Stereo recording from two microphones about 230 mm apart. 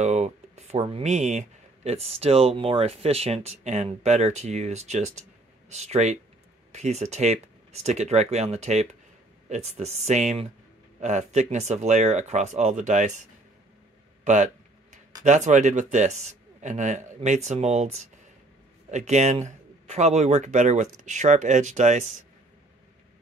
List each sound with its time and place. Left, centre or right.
0.0 s a man's voice: right
14.2 s a sound: right
15.2 s a man's voice: right